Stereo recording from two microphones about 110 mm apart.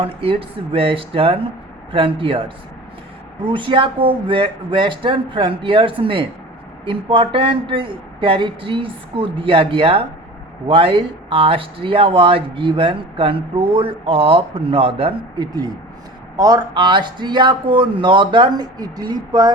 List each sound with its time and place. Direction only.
0.0 s speech: 55° right (ahead or behind)
3.4 s speech: 50° right (ahead or behind)
15.4 s speech: 40° right (ahead or behind)